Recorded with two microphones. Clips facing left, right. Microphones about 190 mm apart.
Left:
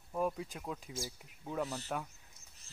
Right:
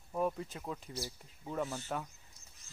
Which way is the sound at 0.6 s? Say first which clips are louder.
Even; centre (ahead or behind).